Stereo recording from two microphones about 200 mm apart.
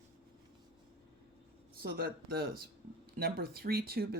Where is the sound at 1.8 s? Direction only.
50° right (ahead or behind).